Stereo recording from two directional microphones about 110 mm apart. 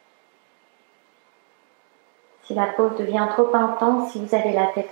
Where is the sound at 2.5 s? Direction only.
20° right (ahead or behind).